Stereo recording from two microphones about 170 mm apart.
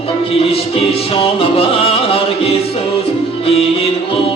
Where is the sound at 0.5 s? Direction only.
35° left (ahead or behind).